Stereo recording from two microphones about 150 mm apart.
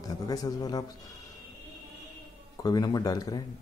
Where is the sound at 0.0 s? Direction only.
25° left (ahead or behind).